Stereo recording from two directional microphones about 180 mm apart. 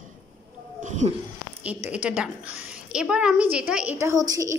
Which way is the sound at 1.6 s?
10° right (ahead or behind).